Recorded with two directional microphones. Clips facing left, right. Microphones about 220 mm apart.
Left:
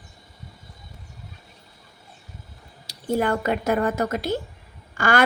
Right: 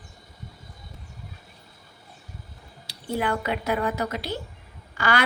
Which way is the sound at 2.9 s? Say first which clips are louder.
Left 4 dB; 45° left (ahead or behind).